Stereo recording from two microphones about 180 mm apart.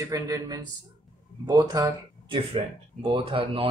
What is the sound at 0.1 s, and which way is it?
Speech, 20° right (ahead or behind).